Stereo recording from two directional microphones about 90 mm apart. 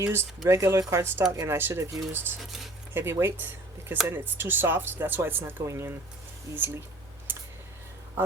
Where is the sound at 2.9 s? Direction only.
25° right (ahead or behind).